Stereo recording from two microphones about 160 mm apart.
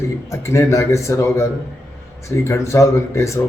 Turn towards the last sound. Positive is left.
turn(degrees=20)  # may be behind; listen again after turning